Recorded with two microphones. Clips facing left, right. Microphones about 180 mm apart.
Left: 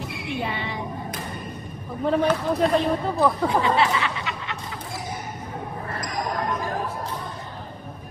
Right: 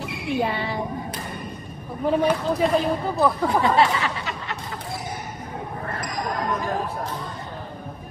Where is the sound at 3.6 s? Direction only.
40° right (ahead or behind).